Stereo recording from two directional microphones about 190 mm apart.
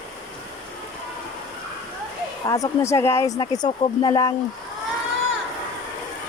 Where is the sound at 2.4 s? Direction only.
15° left (ahead or behind).